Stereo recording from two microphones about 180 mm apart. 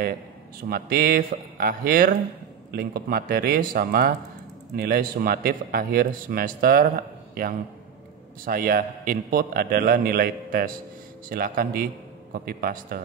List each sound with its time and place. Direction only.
0.7 s a man's voice: 55° right (ahead or behind)
8.5 s a man's voice: 50° right (ahead or behind)